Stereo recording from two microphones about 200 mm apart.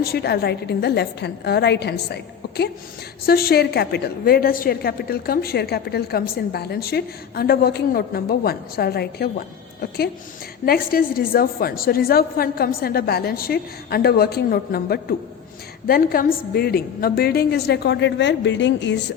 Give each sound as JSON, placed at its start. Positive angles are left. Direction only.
{"t": 0.0, "sound": "a woman's voice", "side_deg": 50}
{"t": 10.7, "sound": "a woman's voice", "side_deg": 45}